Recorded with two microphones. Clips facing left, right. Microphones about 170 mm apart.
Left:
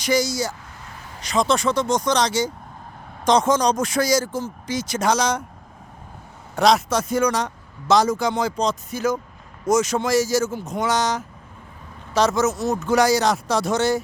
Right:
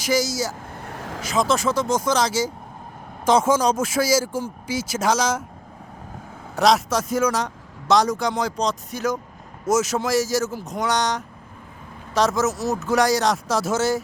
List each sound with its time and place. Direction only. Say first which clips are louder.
0.0 s speech: left 1 dB; centre (ahead or behind)
0.7 s vehicle: right 7 dB; 60° right (ahead or behind)
1.2 s speech: left 1 dB; 5° right (ahead or behind)
6.6 s speech: left 1 dB; centre (ahead or behind)